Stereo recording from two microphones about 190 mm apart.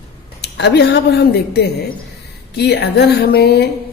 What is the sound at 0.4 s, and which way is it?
Speech, 60° left (ahead or behind).